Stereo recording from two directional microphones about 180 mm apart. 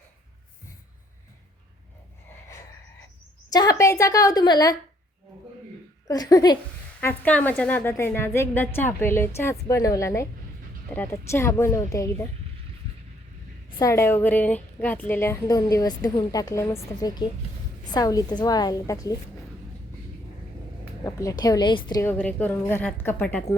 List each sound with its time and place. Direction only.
3.5 s a woman's voice: 20° left (ahead or behind)
6.1 s a woman's voice: 20° left (ahead or behind)
7.0 s a woman's voice: 10° left (ahead or behind)
13.7 s a woman's voice: 20° left (ahead or behind)
21.0 s a woman's voice: 20° left (ahead or behind)
22.0 s a woman's voice: 10° left (ahead or behind)